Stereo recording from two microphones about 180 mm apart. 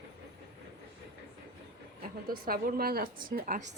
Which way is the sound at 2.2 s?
55° right (ahead or behind).